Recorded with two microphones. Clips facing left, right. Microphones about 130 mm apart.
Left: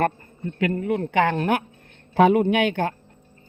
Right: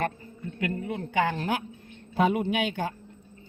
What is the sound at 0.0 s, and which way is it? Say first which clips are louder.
A man's voice: left 7 dB; 60° left (ahead or behind).